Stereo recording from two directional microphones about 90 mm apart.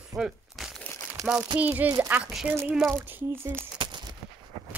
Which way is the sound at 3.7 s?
60° right (ahead or behind).